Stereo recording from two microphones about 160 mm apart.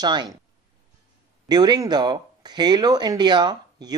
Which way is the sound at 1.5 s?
25° right (ahead or behind).